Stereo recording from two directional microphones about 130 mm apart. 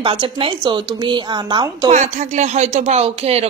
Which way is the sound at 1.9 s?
65° right (ahead or behind).